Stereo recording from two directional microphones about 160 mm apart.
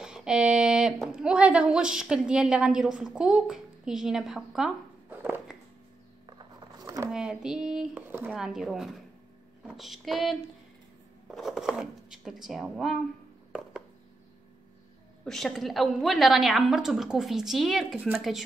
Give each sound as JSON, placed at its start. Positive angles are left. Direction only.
{"t": 0.0, "sound": "speech", "side_deg": -5}
{"t": 5.2, "sound": "a sound", "side_deg": -10}
{"t": 6.2, "sound": "a sound", "side_deg": -25}
{"t": 7.1, "sound": "a woman's voice", "side_deg": -5}
{"t": 11.3, "sound": "a woman's voice", "side_deg": 0}
{"t": 15.2, "sound": "a woman's voice", "side_deg": 0}